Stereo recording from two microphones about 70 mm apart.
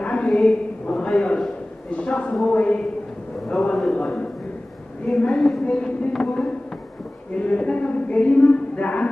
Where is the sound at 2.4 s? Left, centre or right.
Centre.